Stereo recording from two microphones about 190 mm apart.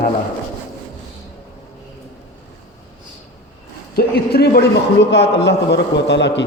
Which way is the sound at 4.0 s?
55° left (ahead or behind).